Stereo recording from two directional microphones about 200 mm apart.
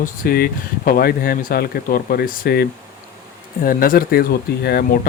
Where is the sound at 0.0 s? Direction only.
45° left (ahead or behind).